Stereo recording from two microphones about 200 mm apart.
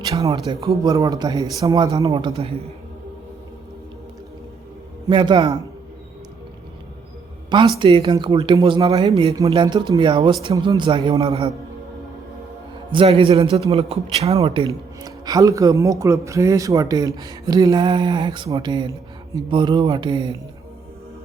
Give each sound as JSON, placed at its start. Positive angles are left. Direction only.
{"t": 0.0, "sound": "speech", "side_deg": -20}
{"t": 5.0, "sound": "speech", "side_deg": -25}
{"t": 7.8, "sound": "speech", "side_deg": -25}
{"t": 12.9, "sound": "speech", "side_deg": -25}